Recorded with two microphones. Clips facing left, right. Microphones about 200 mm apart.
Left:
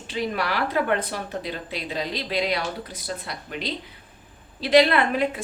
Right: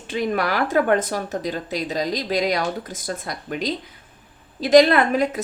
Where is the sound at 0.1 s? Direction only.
50° right (ahead or behind).